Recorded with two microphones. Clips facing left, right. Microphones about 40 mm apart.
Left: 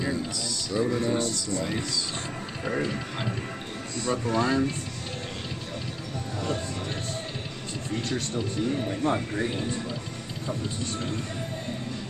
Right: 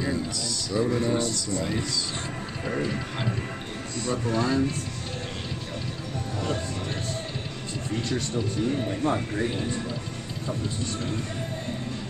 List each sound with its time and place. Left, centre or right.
0.3 s music: left
0.7 s music: centre
4.0 s speech: centre
9.0 s speech: centre